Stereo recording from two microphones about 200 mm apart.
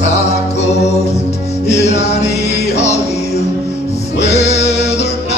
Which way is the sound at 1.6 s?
35° left (ahead or behind).